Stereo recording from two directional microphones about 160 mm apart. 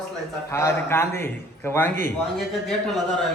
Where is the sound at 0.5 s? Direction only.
15° left (ahead or behind).